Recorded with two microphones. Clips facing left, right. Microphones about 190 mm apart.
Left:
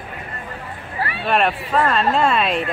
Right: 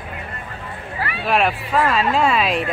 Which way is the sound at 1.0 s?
30° left (ahead or behind).